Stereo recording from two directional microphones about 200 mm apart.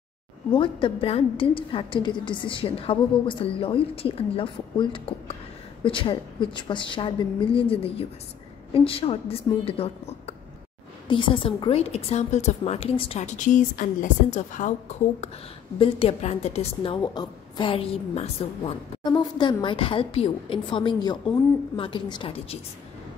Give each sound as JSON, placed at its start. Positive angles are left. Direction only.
{"t": 0.5, "sound": "a woman's voice", "side_deg": 25}